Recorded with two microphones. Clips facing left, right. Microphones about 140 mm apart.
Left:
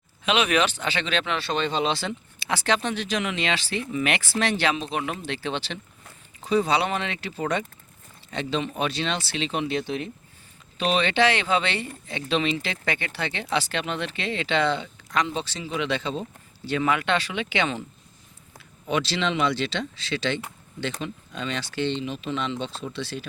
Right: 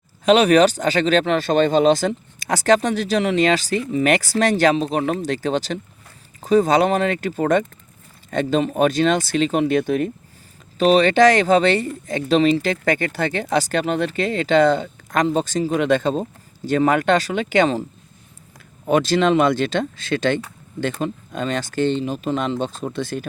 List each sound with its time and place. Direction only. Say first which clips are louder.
0.3 s speech: right 9 dB; 40° right (ahead or behind)
18.9 s speech: right 9 dB; 45° right (ahead or behind)